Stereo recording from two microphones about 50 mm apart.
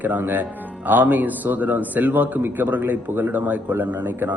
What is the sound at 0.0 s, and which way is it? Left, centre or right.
A man's voice, right.